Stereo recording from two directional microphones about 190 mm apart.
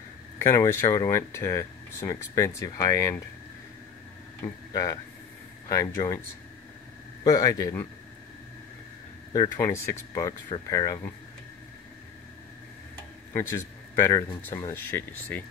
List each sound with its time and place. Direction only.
0.4 s speech: 15° left (ahead or behind)
5.7 s speech: 15° left (ahead or behind)
7.2 s a man's voice: 20° left (ahead or behind)
9.3 s speech: 20° left (ahead or behind)
13.3 s a man's voice: 15° left (ahead or behind)